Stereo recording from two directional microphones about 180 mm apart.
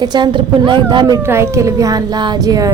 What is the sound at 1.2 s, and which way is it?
Speech, 15° right (ahead or behind).